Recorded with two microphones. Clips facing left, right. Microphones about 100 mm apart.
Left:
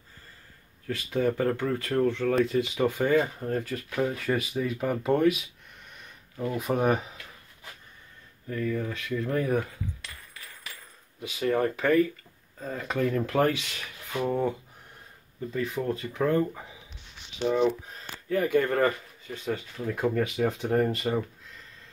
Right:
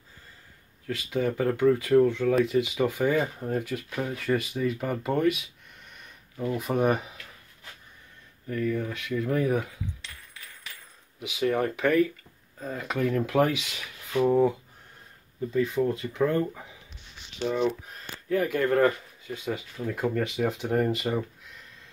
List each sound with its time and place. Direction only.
0.8 s speech: centre (ahead or behind)
8.5 s speech: centre (ahead or behind)
10.0 s a sound: 10° left (ahead or behind)
11.1 s speech: 10° right (ahead or behind)
15.5 s speech: centre (ahead or behind)